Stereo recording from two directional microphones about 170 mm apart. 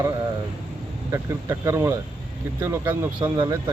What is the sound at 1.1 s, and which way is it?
Speech, 15° right (ahead or behind).